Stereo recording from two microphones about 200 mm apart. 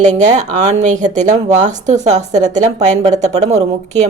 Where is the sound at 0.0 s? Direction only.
35° right (ahead or behind).